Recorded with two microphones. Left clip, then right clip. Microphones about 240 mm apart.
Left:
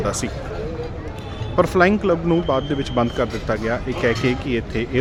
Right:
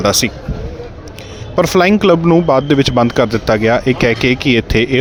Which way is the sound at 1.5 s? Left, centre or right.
Right.